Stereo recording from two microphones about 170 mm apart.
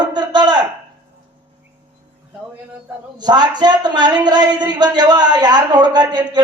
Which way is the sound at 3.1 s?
25° right (ahead or behind).